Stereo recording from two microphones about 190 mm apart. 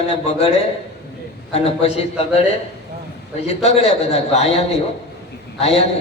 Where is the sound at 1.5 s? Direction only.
30° left (ahead or behind).